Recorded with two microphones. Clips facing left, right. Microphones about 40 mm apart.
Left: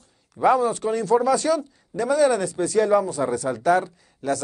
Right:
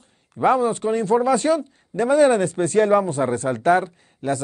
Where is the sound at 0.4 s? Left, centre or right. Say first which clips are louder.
Right 1 dB; right.